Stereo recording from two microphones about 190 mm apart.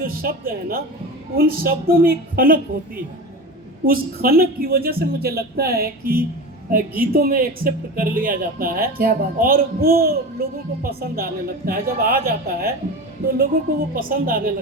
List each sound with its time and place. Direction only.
0.0 s speech: 50° right (ahead or behind)